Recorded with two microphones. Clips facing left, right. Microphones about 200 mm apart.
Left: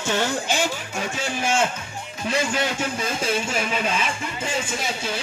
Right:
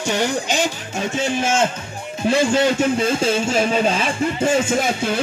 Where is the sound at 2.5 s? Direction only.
30° right (ahead or behind).